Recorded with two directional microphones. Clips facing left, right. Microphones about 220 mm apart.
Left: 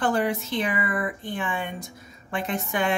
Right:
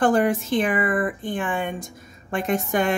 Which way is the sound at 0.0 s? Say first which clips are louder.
Right 5 dB; 50° right (ahead or behind).